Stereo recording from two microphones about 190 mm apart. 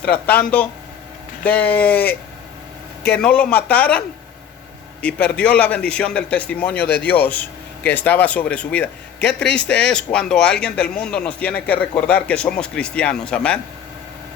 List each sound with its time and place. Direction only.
0.0 s a man's voice: 5° left (ahead or behind)
3.1 s a man's voice: 5° left (ahead or behind)
5.0 s a man's voice: 5° left (ahead or behind)
9.2 s a man's voice: 65° left (ahead or behind)
9.9 s a man's voice: 5° left (ahead or behind)